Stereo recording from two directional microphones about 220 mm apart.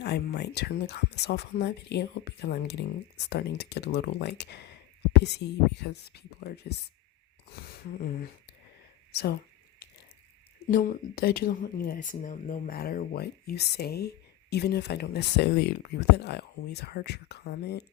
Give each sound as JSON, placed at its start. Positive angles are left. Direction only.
{"t": 0.0, "sound": "speech", "side_deg": 50}
{"t": 10.7, "sound": "speech", "side_deg": 40}